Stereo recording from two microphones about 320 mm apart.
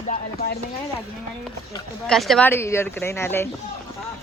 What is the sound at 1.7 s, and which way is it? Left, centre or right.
Speech, centre.